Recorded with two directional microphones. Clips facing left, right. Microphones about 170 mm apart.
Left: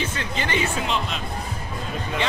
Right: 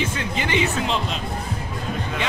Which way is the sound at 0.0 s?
15° right (ahead or behind).